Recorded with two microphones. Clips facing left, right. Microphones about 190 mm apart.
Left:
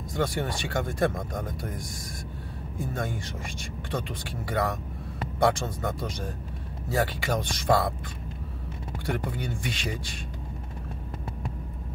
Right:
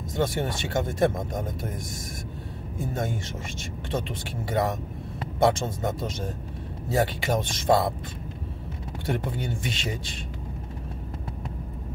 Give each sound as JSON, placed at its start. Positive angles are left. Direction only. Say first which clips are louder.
{"t": 0.1, "sound": "speech", "louder": "right 2 dB", "side_deg": -20}
{"t": 9.0, "sound": "speech", "louder": "right 2 dB", "side_deg": -25}